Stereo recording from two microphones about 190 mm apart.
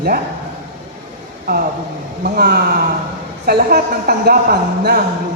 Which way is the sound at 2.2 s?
55° right (ahead or behind).